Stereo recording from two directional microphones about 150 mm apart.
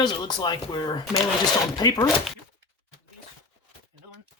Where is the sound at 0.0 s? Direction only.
30° left (ahead or behind).